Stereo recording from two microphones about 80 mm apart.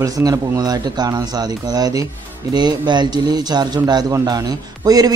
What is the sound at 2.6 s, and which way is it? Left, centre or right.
A man's voice, right.